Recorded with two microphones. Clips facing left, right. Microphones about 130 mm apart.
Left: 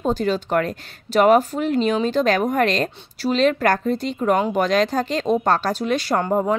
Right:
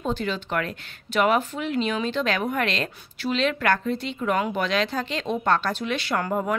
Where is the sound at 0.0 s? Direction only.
40° left (ahead or behind).